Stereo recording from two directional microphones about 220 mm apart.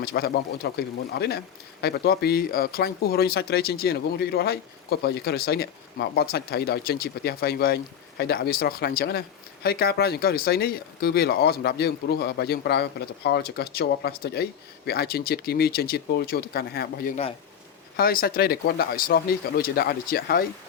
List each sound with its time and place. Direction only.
0.0 s speech: 45° left (ahead or behind)